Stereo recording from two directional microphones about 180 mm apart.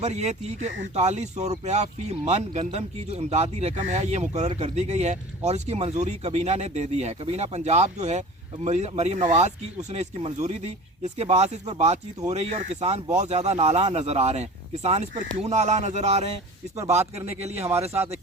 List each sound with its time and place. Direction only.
0.0 s speech: 40° right (ahead or behind)